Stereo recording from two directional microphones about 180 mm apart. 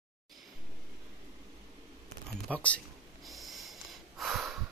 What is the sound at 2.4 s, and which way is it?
Speech, 5° left (ahead or behind).